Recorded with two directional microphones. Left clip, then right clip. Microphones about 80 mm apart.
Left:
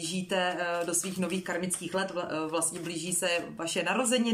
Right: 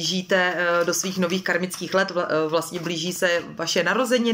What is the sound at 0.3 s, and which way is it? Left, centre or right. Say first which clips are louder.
Speech: right 9 dB; left.